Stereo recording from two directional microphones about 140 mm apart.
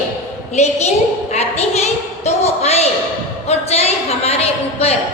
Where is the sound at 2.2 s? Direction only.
50° left (ahead or behind).